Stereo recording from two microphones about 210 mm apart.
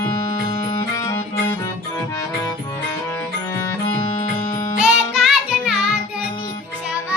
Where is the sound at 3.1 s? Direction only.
10° left (ahead or behind).